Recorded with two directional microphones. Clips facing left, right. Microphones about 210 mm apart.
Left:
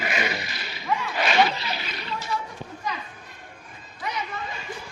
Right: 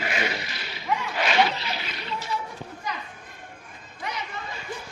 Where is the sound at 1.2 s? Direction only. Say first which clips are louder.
Left 1 dB; 40° left (ahead or behind).